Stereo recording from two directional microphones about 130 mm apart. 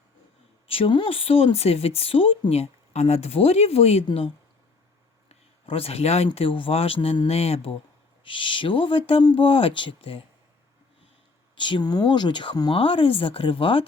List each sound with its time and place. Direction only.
0.7 s speech: 40° left (ahead or behind)
5.3 s speech: 50° left (ahead or behind)
11.5 s speech: 40° left (ahead or behind)